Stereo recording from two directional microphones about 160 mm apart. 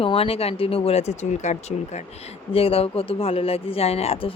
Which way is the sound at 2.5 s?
35° left (ahead or behind).